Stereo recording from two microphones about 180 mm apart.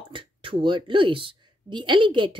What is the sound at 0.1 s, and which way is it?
Speech, 30° right (ahead or behind).